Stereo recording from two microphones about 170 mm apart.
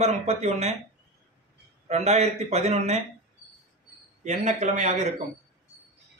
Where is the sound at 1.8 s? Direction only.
40° right (ahead or behind).